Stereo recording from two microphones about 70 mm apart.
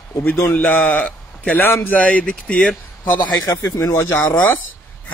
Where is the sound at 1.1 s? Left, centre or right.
Left.